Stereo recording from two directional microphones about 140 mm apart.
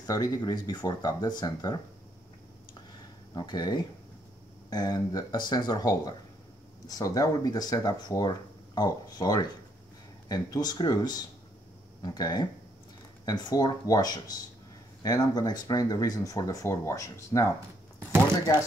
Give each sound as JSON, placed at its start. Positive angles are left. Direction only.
{"t": 0.0, "sound": "speech", "side_deg": 25}
{"t": 3.3, "sound": "speech", "side_deg": 30}